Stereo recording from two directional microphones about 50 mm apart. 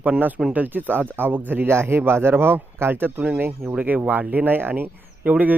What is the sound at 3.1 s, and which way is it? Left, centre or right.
Speech, right.